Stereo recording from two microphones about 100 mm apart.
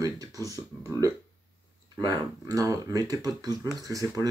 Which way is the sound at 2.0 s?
40° right (ahead or behind).